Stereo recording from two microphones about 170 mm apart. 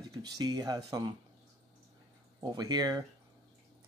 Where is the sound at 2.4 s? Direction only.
25° right (ahead or behind).